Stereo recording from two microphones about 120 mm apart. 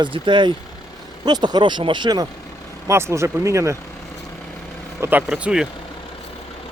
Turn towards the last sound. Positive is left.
turn(degrees=-5)  # may be behind; listen again after turning